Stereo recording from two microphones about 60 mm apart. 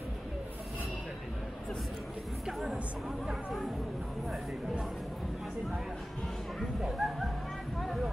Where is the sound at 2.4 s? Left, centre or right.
Centre.